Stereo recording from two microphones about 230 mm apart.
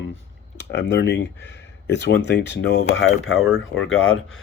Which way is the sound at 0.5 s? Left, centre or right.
Left.